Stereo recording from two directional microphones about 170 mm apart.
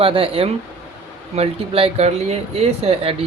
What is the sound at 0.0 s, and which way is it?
Speech, 35° right (ahead or behind).